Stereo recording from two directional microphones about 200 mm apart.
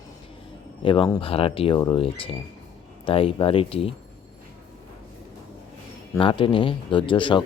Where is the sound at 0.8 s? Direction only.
25° left (ahead or behind).